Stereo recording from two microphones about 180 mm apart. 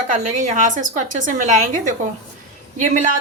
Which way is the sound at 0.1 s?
45° right (ahead or behind).